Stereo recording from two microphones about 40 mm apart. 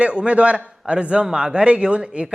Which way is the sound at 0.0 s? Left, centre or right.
Right.